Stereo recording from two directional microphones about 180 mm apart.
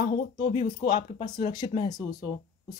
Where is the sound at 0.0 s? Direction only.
30° left (ahead or behind).